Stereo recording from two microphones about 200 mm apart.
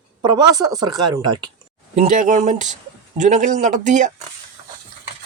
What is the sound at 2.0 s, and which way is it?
A man's voice, 35° right (ahead or behind).